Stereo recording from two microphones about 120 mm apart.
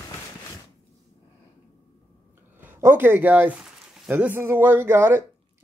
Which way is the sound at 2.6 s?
20° right (ahead or behind).